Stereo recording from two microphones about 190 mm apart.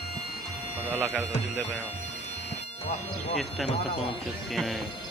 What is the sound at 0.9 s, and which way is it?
Speech, 5° left (ahead or behind).